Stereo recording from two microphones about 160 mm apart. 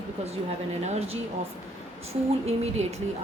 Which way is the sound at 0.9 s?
40° right (ahead or behind).